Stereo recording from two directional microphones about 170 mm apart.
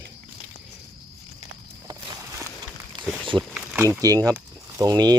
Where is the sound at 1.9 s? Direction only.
25° right (ahead or behind).